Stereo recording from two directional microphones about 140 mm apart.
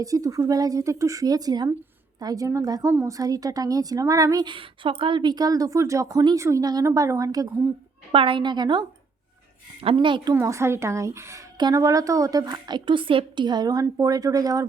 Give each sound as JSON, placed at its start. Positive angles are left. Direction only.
{"t": 0.0, "sound": "a woman's voice", "side_deg": -25}
{"t": 8.1, "sound": "a woman's voice", "side_deg": -40}
{"t": 10.3, "sound": "a woman's voice", "side_deg": -20}